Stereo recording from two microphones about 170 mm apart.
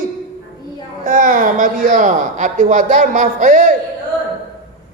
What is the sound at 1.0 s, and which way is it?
A woman's voice, 50° right (ahead or behind).